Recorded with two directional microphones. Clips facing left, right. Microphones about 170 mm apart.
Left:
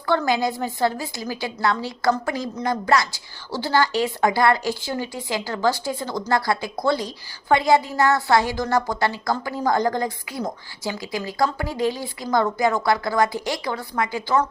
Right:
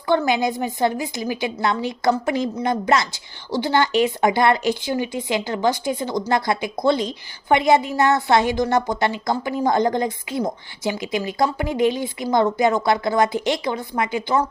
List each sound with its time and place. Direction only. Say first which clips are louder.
0.1 s a woman's voice: right 2 dB; 20° right (ahead or behind)